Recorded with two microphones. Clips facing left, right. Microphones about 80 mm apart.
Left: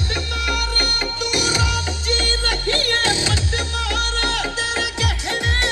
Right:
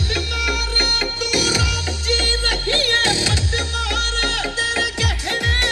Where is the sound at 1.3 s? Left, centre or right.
Left.